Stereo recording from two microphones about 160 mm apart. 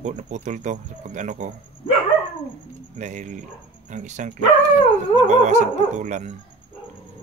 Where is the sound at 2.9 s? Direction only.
50° right (ahead or behind).